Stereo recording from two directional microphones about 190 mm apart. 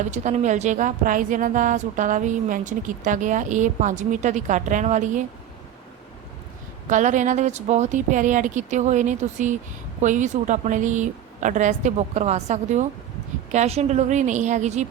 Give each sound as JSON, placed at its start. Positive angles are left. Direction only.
{"t": 0.0, "sound": "a woman's voice", "side_deg": -35}
{"t": 6.8, "sound": "a woman's voice", "side_deg": -40}